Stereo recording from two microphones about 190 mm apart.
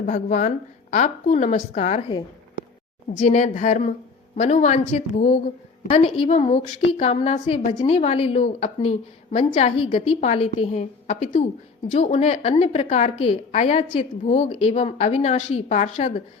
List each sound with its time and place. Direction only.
0.0 s a woman's voice: 45° left (ahead or behind)
3.2 s a woman's voice: 35° left (ahead or behind)
7.9 s a woman's voice: 35° left (ahead or behind)